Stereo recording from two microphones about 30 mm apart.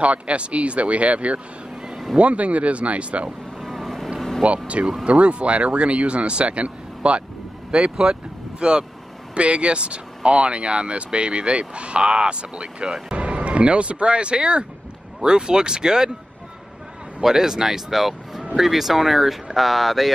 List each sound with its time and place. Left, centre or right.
0.0 s speech: right
3.6 s vehicle: centre
4.4 s speech: right
8.0 s speech: right
9.3 s speech: right
17.2 s speech: centre